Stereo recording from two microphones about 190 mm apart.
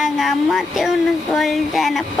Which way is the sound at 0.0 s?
Centre (ahead or behind).